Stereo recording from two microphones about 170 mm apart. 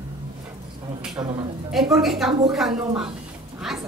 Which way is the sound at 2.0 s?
Centre (ahead or behind).